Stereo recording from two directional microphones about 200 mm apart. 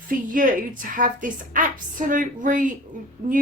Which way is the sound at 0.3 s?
40° right (ahead or behind).